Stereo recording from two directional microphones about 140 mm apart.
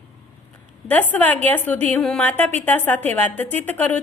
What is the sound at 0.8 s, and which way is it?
A woman's voice, 10° left (ahead or behind).